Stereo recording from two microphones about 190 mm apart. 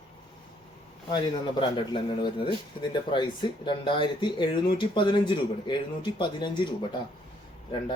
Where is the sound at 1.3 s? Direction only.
25° left (ahead or behind).